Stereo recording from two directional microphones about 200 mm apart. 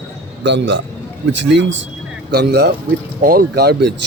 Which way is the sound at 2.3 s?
55° right (ahead or behind).